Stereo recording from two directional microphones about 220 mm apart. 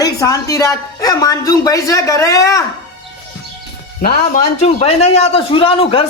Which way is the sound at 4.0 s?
40° left (ahead or behind).